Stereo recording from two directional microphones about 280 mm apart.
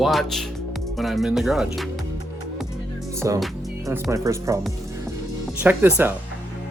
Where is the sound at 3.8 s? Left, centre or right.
Centre.